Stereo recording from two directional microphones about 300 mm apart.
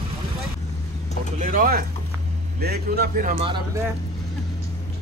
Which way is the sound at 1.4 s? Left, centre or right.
Right.